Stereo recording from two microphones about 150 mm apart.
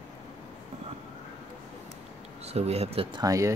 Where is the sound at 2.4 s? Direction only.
45° right (ahead or behind).